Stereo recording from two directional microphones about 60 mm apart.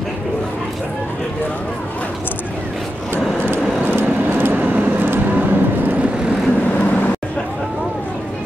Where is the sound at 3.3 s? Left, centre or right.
Right.